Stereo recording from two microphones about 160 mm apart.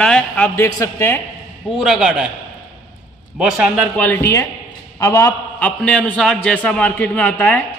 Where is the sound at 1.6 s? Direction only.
Centre (ahead or behind).